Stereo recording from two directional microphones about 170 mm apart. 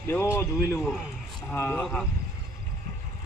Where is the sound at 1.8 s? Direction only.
Centre (ahead or behind).